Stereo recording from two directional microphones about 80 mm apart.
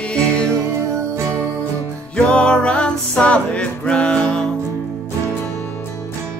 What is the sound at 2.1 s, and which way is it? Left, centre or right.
Music, centre.